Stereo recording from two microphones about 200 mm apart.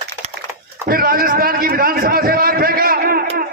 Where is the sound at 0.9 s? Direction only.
45° right (ahead or behind).